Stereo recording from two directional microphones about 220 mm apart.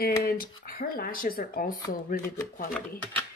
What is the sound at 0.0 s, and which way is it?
Speech, 45° left (ahead or behind).